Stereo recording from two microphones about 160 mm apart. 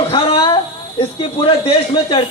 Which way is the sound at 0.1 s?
30° left (ahead or behind).